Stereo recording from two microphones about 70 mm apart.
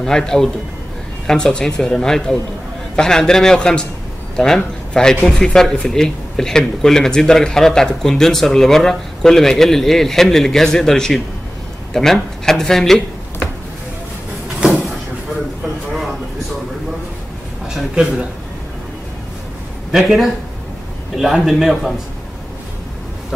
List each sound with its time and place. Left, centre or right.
0.0 s speech: centre
14.6 s vehicle: centre
17.6 s a man's voice: centre
19.9 s speech: centre